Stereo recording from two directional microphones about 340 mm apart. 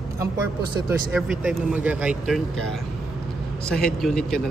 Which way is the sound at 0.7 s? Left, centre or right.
Centre.